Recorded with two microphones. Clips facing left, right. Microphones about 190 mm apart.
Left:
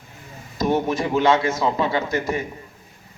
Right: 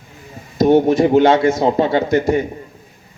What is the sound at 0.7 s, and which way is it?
Speech, 30° right (ahead or behind).